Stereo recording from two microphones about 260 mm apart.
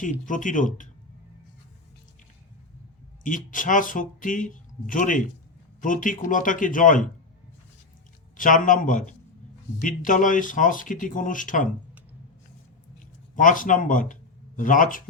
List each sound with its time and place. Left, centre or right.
0.0 s speech: left
3.2 s speech: left
8.4 s speech: left
13.3 s speech: left